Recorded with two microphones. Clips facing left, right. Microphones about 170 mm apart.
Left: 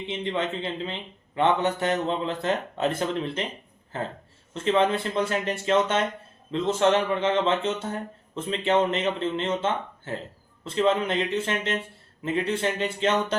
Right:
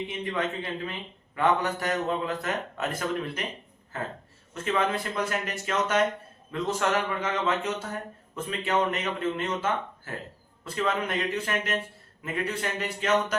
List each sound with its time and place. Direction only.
0.1 s a man's voice: 25° left (ahead or behind)